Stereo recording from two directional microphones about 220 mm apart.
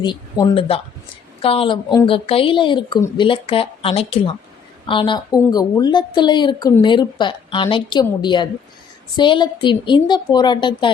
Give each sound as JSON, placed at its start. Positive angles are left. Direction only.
{"t": 0.0, "sound": "a woman's voice", "side_deg": 20}